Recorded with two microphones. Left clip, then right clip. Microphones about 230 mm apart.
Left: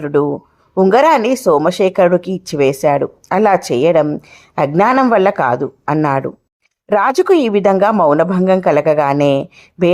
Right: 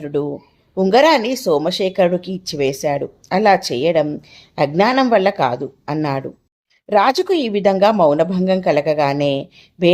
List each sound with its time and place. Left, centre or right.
0.0 s speech: centre